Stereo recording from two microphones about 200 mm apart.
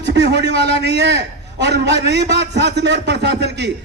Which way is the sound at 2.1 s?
60° right (ahead or behind).